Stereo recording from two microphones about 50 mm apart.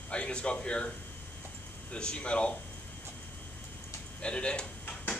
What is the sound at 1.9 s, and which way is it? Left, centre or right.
Speech, centre.